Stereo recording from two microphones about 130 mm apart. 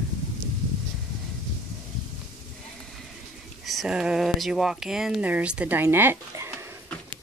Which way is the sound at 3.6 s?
Centre (ahead or behind).